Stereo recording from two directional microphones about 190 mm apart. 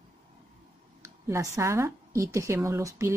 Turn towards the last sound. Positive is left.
turn(degrees=-15)  # may be behind; listen again after turning